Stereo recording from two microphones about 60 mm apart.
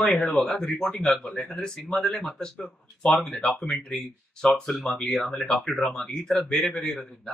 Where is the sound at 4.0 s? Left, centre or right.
Centre.